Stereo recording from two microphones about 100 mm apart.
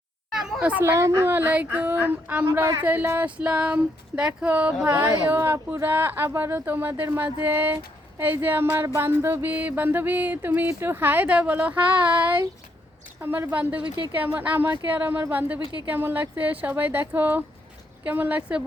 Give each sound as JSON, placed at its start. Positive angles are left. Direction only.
{"t": 0.6, "sound": "music", "side_deg": -15}
{"t": 0.9, "sound": "a woman's voice", "side_deg": -30}
{"t": 1.3, "sound": "music", "side_deg": -15}
{"t": 2.5, "sound": "music", "side_deg": -30}
{"t": 5.2, "sound": "speech", "side_deg": -20}
{"t": 9.0, "sound": "music", "side_deg": -25}
{"t": 13.2, "sound": "music", "side_deg": -20}